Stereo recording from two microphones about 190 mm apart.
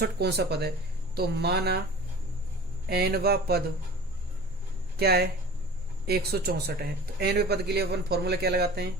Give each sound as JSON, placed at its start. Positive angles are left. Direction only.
{"t": 0.0, "sound": "speech", "side_deg": -60}
{"t": 2.8, "sound": "speech", "side_deg": -55}
{"t": 4.9, "sound": "speech", "side_deg": -55}